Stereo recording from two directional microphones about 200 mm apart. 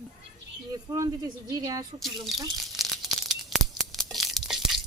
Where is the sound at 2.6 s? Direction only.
Centre (ahead or behind).